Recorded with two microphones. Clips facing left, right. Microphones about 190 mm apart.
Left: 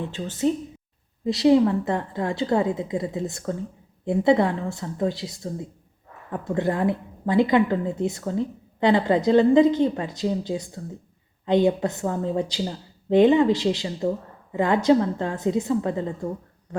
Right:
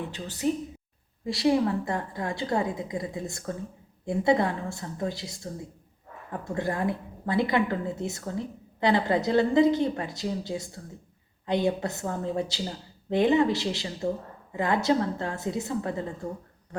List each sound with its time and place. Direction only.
0.1 s a woman's voice: 20° left (ahead or behind)